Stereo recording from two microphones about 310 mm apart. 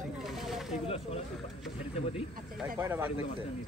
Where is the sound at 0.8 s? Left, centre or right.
Centre.